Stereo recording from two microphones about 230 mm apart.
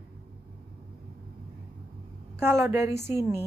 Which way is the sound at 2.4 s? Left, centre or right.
Centre.